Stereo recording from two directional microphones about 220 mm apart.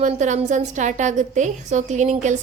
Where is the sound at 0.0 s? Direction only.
35° right (ahead or behind).